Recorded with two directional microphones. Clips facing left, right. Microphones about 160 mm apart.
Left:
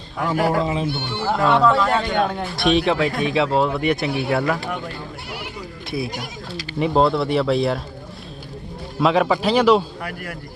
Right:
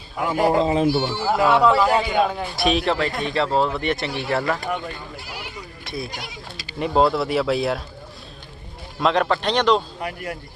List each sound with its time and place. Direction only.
0.2 s a man's voice: 20° right (ahead or behind)
1.1 s speech: 5° right (ahead or behind)
6.7 s speech: centre (ahead or behind)
9.0 s speech: 5° left (ahead or behind)
10.0 s a man's voice: 20° right (ahead or behind)